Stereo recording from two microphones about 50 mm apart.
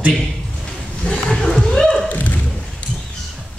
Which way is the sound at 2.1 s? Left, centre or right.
Left.